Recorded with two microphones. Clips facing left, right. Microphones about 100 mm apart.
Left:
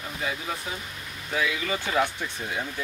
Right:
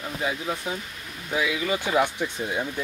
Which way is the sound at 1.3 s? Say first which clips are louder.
Right 2 dB; 15° right (ahead or behind).